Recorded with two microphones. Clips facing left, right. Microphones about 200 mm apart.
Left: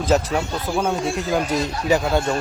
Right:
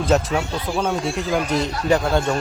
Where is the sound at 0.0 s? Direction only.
Centre (ahead or behind).